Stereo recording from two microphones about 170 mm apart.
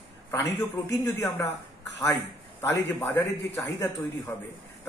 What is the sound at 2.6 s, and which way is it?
A man's voice, 15° left (ahead or behind).